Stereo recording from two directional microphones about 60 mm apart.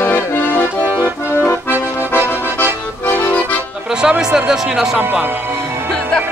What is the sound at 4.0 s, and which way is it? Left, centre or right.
Speech, centre.